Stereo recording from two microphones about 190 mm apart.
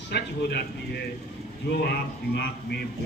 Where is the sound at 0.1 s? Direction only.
60° left (ahead or behind).